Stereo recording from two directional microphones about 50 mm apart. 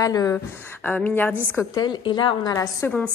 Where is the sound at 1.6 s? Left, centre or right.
Left.